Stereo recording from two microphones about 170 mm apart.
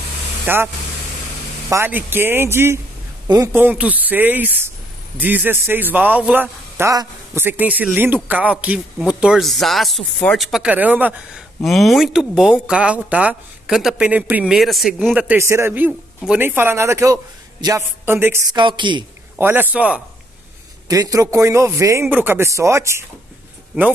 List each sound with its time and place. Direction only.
0.5 s a man's voice: 10° right (ahead or behind)
1.7 s a man's voice: 10° right (ahead or behind)
11.6 s a man's voice: centre (ahead or behind); by 19.0 s 30° right (ahead or behind)
19.3 s a man's voice: 10° right (ahead or behind)
20.9 s a man's voice: 20° right (ahead or behind)